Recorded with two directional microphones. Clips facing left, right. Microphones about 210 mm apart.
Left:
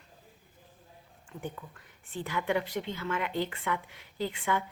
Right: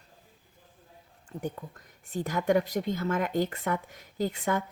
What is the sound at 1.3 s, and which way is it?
Speech, 40° right (ahead or behind).